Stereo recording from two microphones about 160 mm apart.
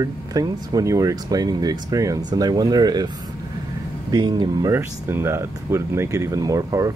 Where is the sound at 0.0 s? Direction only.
25° right (ahead or behind).